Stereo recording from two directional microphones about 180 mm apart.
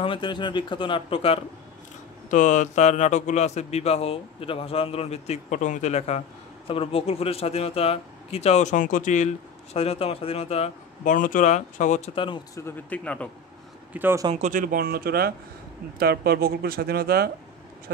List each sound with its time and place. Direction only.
0.0 s speech: 25° left (ahead or behind)
2.3 s a man's voice: 45° left (ahead or behind)
11.1 s speech: 45° left (ahead or behind)
12.5 s a man's voice: 10° left (ahead or behind)
13.9 s a man's voice: 10° right (ahead or behind)
14.3 s speech: 45° right (ahead or behind)